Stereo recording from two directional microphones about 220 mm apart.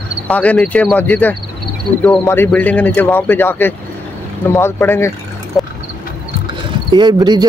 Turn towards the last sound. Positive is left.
turn(degrees=-20)  # may be behind; listen again after turning